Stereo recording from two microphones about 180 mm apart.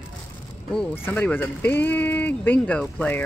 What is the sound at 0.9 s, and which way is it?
Speech, 10° left (ahead or behind).